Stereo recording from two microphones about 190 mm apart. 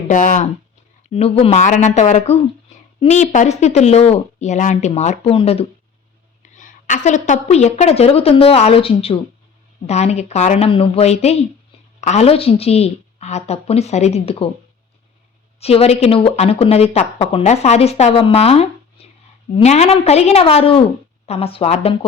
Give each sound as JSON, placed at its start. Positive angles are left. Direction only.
{"t": 0.1, "sound": "speech", "side_deg": 45}
{"t": 1.1, "sound": "speech", "side_deg": 30}
{"t": 6.4, "sound": "speech", "side_deg": 40}
{"t": 15.6, "sound": "speech", "side_deg": 30}